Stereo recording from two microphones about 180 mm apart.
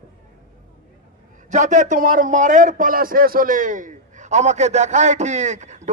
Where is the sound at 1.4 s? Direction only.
40° right (ahead or behind).